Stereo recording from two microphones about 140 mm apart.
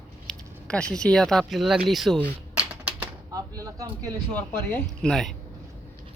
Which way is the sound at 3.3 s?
25° right (ahead or behind).